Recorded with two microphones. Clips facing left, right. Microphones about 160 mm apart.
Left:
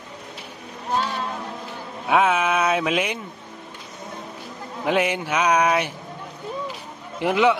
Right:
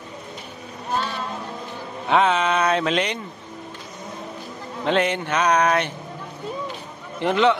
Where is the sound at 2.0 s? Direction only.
5° left (ahead or behind).